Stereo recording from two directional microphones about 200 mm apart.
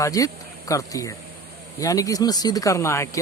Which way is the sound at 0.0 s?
15° left (ahead or behind).